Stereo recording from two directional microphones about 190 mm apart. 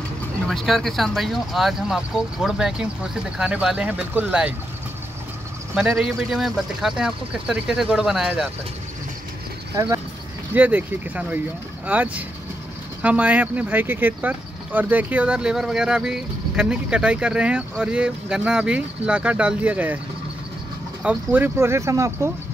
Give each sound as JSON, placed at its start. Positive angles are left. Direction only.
{"t": 0.5, "sound": "speech", "side_deg": 0}
{"t": 5.8, "sound": "speech", "side_deg": -5}
{"t": 9.8, "sound": "speech", "side_deg": -20}
{"t": 21.0, "sound": "speech", "side_deg": -10}